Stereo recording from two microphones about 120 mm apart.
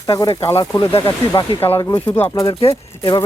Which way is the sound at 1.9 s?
15° left (ahead or behind).